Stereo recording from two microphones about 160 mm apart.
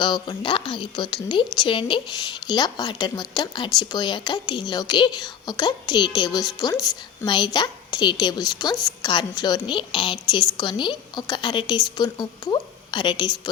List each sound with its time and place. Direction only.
0.0 s a woman's voice: 30° left (ahead or behind)